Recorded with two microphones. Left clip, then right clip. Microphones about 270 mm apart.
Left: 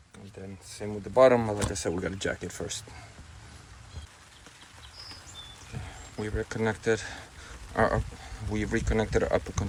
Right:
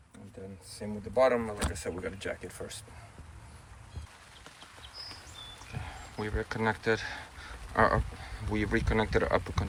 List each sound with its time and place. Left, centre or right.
0.8 s speech: left
1.7 s speech: left
5.7 s speech: centre